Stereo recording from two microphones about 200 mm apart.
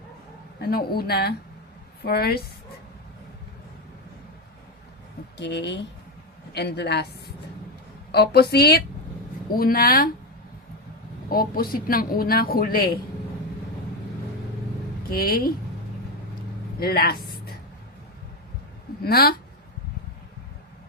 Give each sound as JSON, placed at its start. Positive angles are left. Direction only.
{"t": 0.6, "sound": "speech", "side_deg": 50}
{"t": 5.4, "sound": "a woman's voice", "side_deg": 60}
{"t": 8.1, "sound": "speech", "side_deg": 55}
{"t": 11.3, "sound": "speech", "side_deg": 45}
{"t": 15.1, "sound": "speech", "side_deg": 45}
{"t": 16.8, "sound": "a woman's voice", "side_deg": 50}
{"t": 19.0, "sound": "speech", "side_deg": 50}